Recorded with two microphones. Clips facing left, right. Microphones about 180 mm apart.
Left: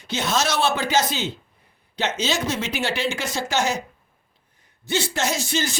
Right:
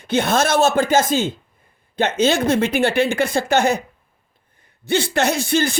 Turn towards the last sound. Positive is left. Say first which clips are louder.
# right 6 dB
turn(degrees=-55)  # may be behind; listen again after turning